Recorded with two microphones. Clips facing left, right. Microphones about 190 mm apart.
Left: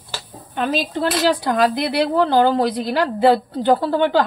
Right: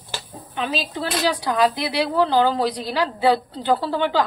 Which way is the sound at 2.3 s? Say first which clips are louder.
Left 3 dB; 50° left (ahead or behind).